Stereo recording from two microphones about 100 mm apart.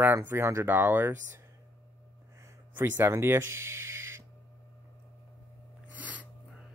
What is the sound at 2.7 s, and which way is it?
Speech, 20° right (ahead or behind).